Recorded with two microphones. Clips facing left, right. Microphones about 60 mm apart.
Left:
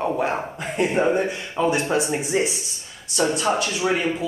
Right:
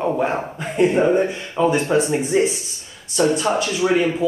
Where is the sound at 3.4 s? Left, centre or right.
Centre.